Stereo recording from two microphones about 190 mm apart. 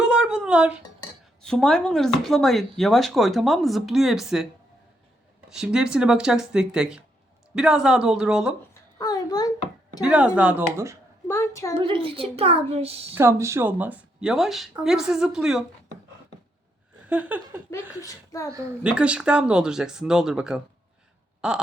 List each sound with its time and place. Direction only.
0.0 s a sound: 5° right (ahead or behind)
1.4 s speech: 5° left (ahead or behind)
5.5 s speech: 5° right (ahead or behind)
9.0 s a sound: 20° left (ahead or behind)
10.0 s speech: 5° right (ahead or behind)
11.3 s a woman's voice: 15° left (ahead or behind)
11.8 s a child's voice: 25° right (ahead or behind)
13.1 s speech: 15° right (ahead or behind)
17.1 s speech: 5° right (ahead or behind)
17.7 s a woman's voice: 15° left (ahead or behind)
18.8 s speech: 5° right (ahead or behind)